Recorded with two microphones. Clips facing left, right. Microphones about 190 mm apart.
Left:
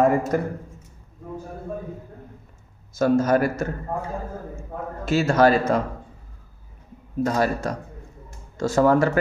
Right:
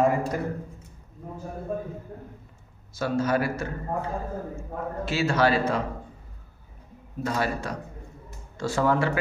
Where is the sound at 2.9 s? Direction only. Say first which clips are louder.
Left 6 dB; 45° left (ahead or behind).